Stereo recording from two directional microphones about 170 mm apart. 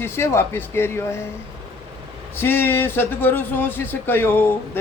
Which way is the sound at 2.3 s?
10° left (ahead or behind).